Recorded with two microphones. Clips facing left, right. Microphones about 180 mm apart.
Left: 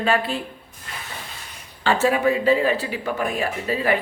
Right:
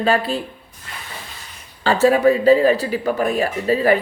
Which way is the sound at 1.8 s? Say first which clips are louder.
Right 5 dB; 40° right (ahead or behind).